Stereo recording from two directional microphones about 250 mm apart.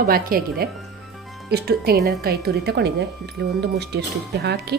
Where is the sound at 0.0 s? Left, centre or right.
Right.